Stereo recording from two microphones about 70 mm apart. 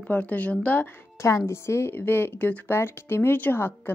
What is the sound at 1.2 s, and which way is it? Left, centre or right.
Speech, left.